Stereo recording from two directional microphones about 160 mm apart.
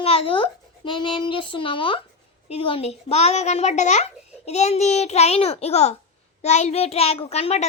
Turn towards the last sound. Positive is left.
turn(degrees=40)  # may be behind; listen again after turning